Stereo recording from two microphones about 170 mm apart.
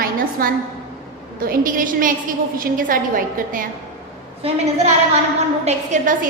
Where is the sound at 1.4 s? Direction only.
55° right (ahead or behind).